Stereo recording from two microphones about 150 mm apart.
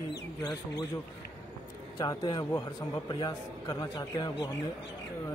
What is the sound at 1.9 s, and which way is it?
A man's voice, 25° left (ahead or behind).